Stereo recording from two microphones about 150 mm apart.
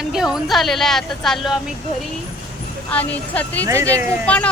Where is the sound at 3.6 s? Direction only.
20° right (ahead or behind).